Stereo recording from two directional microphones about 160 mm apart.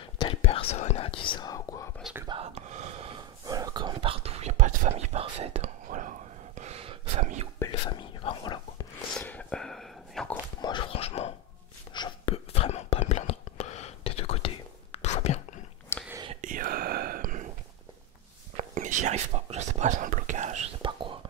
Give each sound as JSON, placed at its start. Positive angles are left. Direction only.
{"t": 0.3, "sound": "whispering", "side_deg": 40}
{"t": 2.2, "sound": "gasp", "side_deg": -40}
{"t": 3.4, "sound": "whispering", "side_deg": -25}
{"t": 5.9, "sound": "a sound", "side_deg": -55}
{"t": 7.8, "sound": "whispering", "side_deg": 30}
{"t": 9.1, "sound": "a sound", "side_deg": 10}
{"t": 10.6, "sound": "whispering", "side_deg": 30}
{"t": 15.9, "sound": "whispering", "side_deg": 15}
{"t": 16.3, "sound": "whispering", "side_deg": -55}
{"t": 18.6, "sound": "whispering", "side_deg": -50}